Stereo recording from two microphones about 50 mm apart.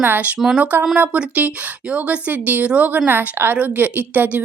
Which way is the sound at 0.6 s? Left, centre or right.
Right.